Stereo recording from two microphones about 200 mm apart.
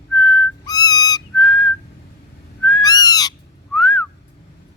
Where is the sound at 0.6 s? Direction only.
20° left (ahead or behind).